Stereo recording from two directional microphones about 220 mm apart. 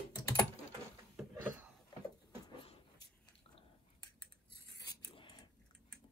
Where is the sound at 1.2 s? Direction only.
5° right (ahead or behind).